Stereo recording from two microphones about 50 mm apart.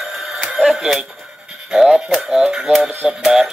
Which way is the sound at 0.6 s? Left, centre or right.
Centre.